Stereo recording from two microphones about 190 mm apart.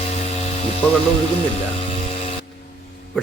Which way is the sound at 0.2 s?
35° left (ahead or behind).